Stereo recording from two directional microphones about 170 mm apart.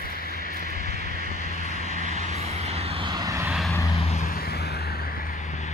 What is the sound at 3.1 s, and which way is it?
Vehicle, 20° right (ahead or behind).